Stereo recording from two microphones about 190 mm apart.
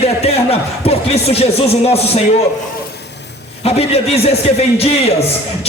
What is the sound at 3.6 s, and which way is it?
Speech, 30° left (ahead or behind).